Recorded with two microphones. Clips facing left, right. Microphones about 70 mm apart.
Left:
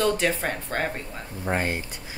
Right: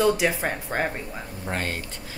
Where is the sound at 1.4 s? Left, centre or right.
Centre.